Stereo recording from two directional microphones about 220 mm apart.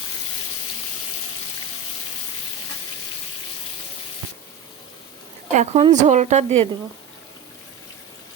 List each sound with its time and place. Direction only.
5.5 s a woman's voice: 30° right (ahead or behind)